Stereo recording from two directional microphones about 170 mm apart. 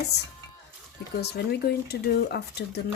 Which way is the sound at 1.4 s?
70° left (ahead or behind).